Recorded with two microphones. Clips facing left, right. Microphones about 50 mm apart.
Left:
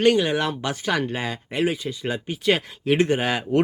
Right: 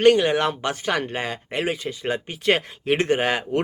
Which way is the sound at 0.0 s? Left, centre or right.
Right.